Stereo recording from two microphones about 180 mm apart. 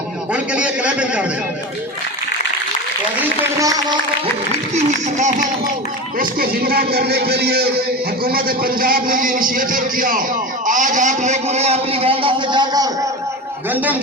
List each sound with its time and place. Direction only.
0.3 s a man's voice: 5° right (ahead or behind)
3.6 s music: 20° right (ahead or behind)
4.7 s a man's voice: 40° right (ahead or behind)
6.1 s a man's voice: 55° right (ahead or behind); by 13.1 s 20° right (ahead or behind)
13.7 s a man's voice: 10° right (ahead or behind)